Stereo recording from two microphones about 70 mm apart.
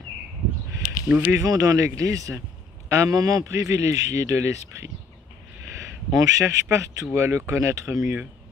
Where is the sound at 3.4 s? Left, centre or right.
Right.